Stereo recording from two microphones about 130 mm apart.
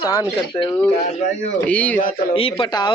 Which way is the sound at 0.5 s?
25° left (ahead or behind).